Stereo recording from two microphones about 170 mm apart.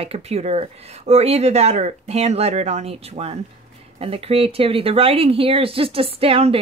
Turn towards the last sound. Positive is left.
turn(degrees=-35)  # may be behind; listen again after turning